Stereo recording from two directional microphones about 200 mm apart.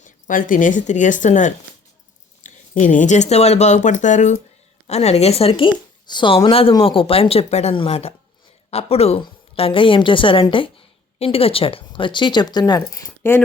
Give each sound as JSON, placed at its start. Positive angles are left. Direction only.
{"t": 0.0, "sound": "a woman's voice", "side_deg": 40}